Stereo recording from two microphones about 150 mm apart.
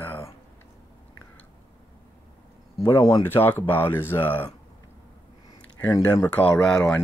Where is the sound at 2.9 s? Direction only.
20° left (ahead or behind).